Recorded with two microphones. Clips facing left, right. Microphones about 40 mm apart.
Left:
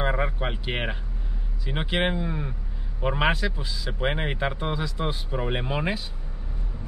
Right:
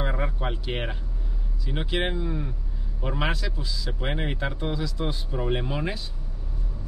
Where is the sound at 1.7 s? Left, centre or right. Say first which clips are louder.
Left 2 dB; left.